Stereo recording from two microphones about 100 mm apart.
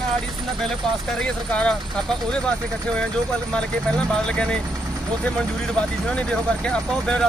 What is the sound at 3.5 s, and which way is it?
Speech, 10° left (ahead or behind).